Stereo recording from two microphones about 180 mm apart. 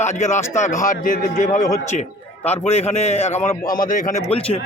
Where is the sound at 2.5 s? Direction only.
35° left (ahead or behind).